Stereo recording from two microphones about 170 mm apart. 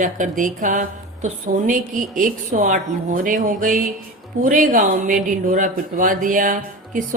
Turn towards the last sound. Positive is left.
turn(degrees=-50)  # may be behind; listen again after turning